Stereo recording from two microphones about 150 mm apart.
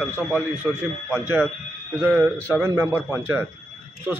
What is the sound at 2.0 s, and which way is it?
A man's voice, 10° right (ahead or behind).